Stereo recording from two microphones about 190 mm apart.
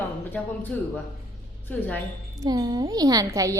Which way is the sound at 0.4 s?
5° left (ahead or behind).